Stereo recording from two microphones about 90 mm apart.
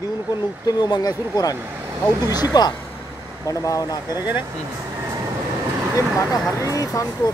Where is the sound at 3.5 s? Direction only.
40° left (ahead or behind).